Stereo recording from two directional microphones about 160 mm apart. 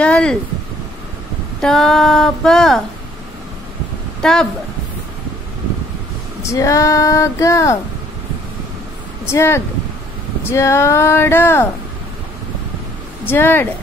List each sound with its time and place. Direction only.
0.0 s a sound: 5° left (ahead or behind)
1.6 s a sound: 5° left (ahead or behind)
4.2 s speech: 5° left (ahead or behind)
6.5 s female singing: 20° left (ahead or behind)
9.2 s speech: 15° left (ahead or behind)
13.2 s speech: 15° left (ahead or behind)